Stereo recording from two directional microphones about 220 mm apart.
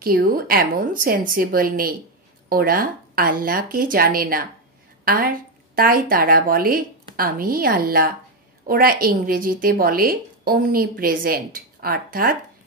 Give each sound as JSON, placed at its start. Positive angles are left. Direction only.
{"t": 0.0, "sound": "a woman's voice", "side_deg": -40}